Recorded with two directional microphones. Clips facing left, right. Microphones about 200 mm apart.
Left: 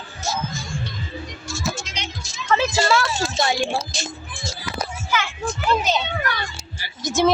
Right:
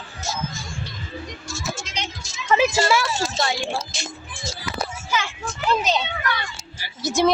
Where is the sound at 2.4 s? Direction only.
10° right (ahead or behind).